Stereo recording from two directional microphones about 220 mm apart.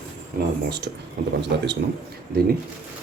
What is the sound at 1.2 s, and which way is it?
Speech, 45° right (ahead or behind).